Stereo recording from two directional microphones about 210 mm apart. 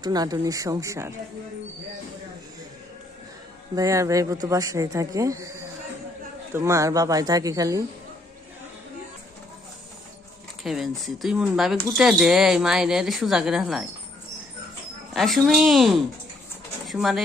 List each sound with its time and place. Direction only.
0.0 s speech: 20° right (ahead or behind)
3.7 s speech: 15° right (ahead or behind)
10.6 s a woman's voice: centre (ahead or behind)
15.1 s a woman's voice: centre (ahead or behind)